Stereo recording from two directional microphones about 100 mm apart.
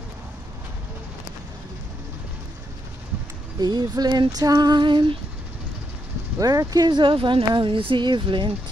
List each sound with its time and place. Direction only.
3.5 s female singing: 45° right (ahead or behind)
6.4 s speech: 35° right (ahead or behind); by 8.5 s 55° right (ahead or behind)